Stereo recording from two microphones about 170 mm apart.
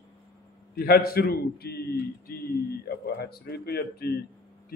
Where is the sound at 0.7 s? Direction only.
60° left (ahead or behind).